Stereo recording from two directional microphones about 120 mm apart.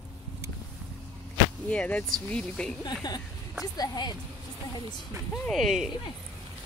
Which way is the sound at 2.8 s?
35° left (ahead or behind).